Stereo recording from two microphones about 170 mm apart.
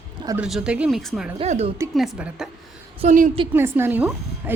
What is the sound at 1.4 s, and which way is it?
Speech, 35° right (ahead or behind).